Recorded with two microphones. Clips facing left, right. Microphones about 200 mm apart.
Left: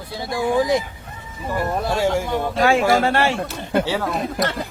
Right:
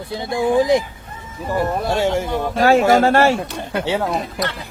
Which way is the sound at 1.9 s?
25° right (ahead or behind).